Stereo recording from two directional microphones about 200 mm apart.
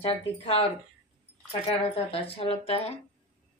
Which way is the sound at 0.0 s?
25° left (ahead or behind).